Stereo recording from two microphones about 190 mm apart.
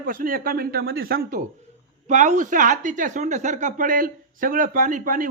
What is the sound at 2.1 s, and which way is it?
Speech, 40° right (ahead or behind).